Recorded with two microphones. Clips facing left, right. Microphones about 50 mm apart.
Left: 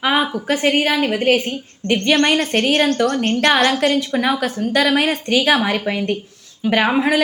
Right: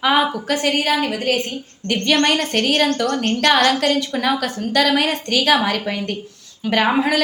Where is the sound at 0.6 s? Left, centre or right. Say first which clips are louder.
Left 2 dB; left.